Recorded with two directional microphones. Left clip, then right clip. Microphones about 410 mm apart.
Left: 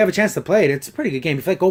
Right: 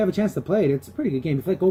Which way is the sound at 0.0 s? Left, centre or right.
Centre.